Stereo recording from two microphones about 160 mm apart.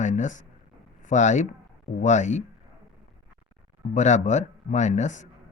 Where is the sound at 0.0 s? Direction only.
50° left (ahead or behind).